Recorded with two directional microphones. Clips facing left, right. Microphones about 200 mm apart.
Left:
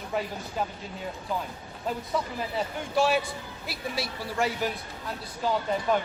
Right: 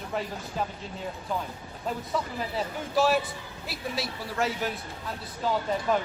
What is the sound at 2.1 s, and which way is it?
A man's voice, centre (ahead or behind).